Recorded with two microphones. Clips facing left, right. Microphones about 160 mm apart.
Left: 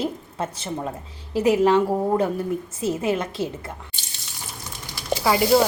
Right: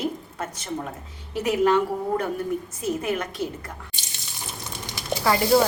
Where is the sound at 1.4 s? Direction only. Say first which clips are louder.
Left 3 dB; 25° left (ahead or behind).